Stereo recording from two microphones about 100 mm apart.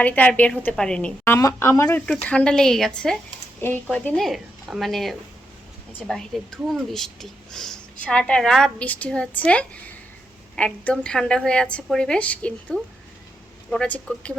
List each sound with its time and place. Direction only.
0.0 s a woman's voice: 15° left (ahead or behind)
1.2 s speech: 30° left (ahead or behind)
1.9 s a woman's voice: 10° left (ahead or behind)
3.6 s a woman's voice: 20° left (ahead or behind)
4.2 s a woman's voice: centre (ahead or behind)
13.8 s a woman's voice: 15° left (ahead or behind)